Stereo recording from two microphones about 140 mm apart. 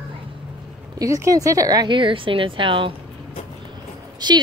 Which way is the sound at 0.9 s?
25° right (ahead or behind).